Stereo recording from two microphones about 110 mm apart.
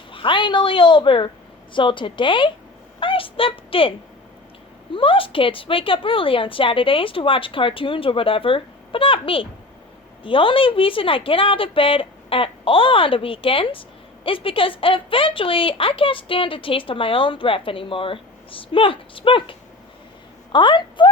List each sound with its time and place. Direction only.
0.1 s a woman's voice: 50° left (ahead or behind)